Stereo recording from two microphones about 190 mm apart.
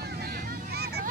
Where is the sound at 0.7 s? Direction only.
55° right (ahead or behind).